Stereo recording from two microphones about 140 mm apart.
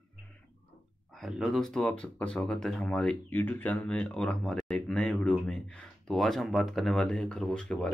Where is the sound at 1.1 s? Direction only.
Centre (ahead or behind).